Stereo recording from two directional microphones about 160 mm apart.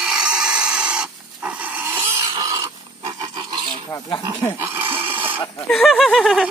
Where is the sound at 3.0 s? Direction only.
25° right (ahead or behind).